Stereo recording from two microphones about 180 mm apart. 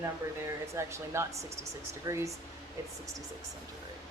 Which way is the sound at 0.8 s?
15° right (ahead or behind).